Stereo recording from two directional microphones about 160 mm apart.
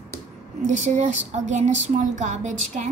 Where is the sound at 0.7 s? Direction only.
45° right (ahead or behind).